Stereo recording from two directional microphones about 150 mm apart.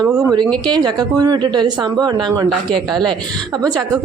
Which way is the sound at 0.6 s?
30° right (ahead or behind).